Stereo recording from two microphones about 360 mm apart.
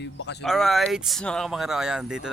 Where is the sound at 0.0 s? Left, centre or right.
Left.